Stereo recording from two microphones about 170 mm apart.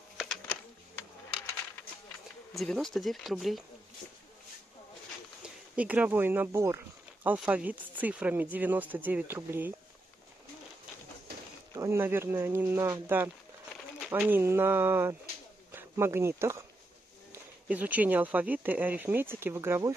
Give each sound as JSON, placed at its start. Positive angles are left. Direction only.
{"t": 2.5, "sound": "speech", "side_deg": 0}
{"t": 5.4, "sound": "speech", "side_deg": -10}
{"t": 11.7, "sound": "speech", "side_deg": -15}
{"t": 14.3, "sound": "speech", "side_deg": -15}
{"t": 15.7, "sound": "a sound", "side_deg": -15}
{"t": 17.3, "sound": "speech", "side_deg": -10}